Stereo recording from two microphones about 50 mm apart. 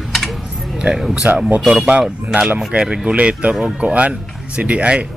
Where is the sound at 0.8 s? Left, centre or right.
Centre.